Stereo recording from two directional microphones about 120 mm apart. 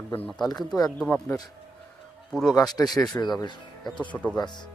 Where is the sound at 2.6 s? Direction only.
30° left (ahead or behind).